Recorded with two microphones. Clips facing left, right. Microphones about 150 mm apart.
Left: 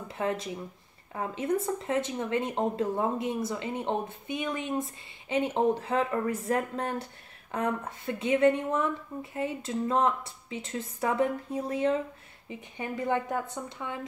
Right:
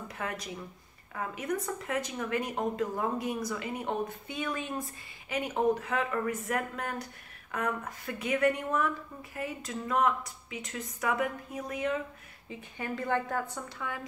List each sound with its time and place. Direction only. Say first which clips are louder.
0.1 s a woman's voice: left 8 dB; 25° left (ahead or behind)